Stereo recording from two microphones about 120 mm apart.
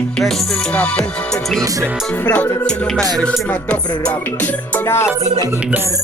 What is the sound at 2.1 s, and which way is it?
Music, 15° left (ahead or behind).